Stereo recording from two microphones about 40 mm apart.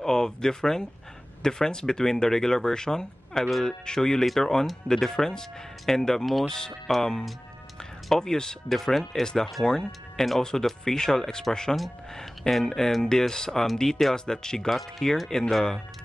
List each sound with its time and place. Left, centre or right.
0.0 s speech: centre
8.6 s speech: centre
9.2 s speech: centre
14.7 s speech: centre